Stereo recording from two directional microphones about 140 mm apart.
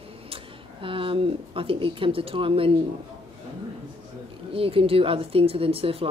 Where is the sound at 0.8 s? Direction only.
40° right (ahead or behind).